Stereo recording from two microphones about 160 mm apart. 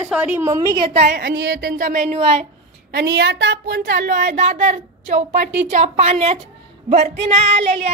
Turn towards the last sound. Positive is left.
turn(degrees=-40)  # may be behind; listen again after turning